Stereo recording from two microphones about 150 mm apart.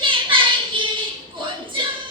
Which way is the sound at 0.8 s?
35° right (ahead or behind).